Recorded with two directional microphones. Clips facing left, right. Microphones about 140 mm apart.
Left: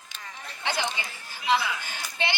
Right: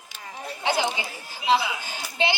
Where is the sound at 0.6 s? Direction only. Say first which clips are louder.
Right 5 dB; 10° right (ahead or behind).